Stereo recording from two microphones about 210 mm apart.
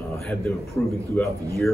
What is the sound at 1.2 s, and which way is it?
Speech, 10° left (ahead or behind).